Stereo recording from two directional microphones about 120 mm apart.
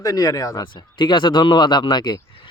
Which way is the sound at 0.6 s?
40° left (ahead or behind).